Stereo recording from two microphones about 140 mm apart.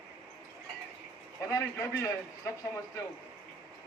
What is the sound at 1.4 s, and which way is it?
Speech, 20° left (ahead or behind).